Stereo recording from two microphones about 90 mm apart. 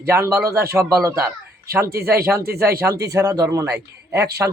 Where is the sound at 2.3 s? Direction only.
30° right (ahead or behind).